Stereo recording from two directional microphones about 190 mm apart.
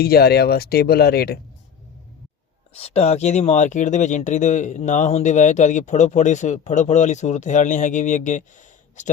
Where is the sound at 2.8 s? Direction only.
30° left (ahead or behind).